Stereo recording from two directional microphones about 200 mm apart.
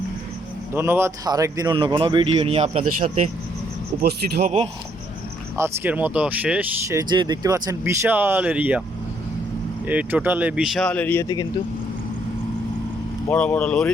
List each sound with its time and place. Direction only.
0.7 s a man's voice: 10° right (ahead or behind); by 4.5 s 50° right (ahead or behind)
5.5 s speech: 10° right (ahead or behind)
9.8 s speech: 10° right (ahead or behind); by 11.4 s 15° left (ahead or behind)
13.2 s speech: 5° left (ahead or behind)